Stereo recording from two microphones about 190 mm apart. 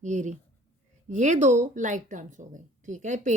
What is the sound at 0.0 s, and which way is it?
Speech, 40° right (ahead or behind).